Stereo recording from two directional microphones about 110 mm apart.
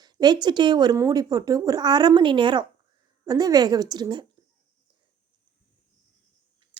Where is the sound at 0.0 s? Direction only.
40° right (ahead or behind).